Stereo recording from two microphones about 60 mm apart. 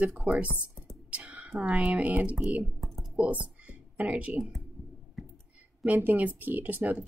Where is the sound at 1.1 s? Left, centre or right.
Right.